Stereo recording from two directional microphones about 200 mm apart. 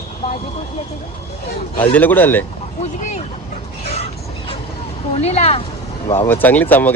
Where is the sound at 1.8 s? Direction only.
10° left (ahead or behind).